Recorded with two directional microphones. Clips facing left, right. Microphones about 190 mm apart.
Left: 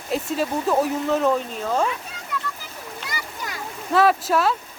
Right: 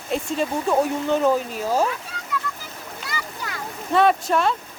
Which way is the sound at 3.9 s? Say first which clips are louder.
Even; centre (ahead or behind).